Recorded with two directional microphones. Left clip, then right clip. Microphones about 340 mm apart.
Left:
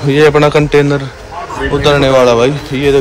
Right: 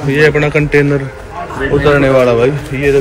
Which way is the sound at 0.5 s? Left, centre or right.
Centre.